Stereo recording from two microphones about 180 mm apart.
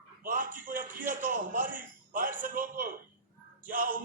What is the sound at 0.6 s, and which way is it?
A man's voice, 50° right (ahead or behind).